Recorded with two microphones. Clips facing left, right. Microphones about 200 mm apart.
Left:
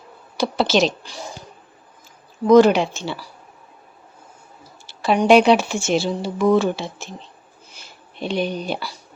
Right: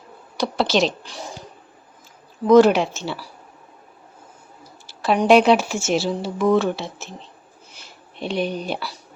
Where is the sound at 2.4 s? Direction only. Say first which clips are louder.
Left 1 dB; centre (ahead or behind).